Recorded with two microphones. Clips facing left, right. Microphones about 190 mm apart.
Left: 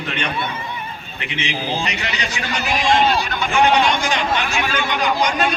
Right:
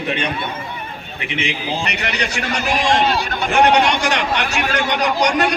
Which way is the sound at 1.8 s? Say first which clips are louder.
Right 2 dB; 65° right (ahead or behind).